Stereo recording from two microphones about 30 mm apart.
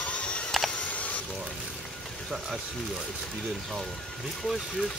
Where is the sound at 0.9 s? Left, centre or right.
Left.